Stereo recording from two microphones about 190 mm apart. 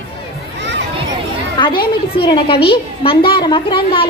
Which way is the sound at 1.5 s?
25° left (ahead or behind).